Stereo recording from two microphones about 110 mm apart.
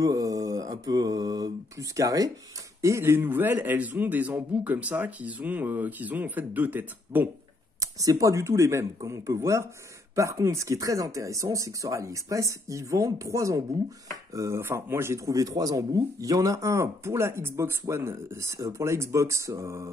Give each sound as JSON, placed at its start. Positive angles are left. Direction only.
{"t": 0.0, "sound": "mantra", "side_deg": -35}
{"t": 2.8, "sound": "a man's voice", "side_deg": -25}
{"t": 7.8, "sound": "speech", "side_deg": -30}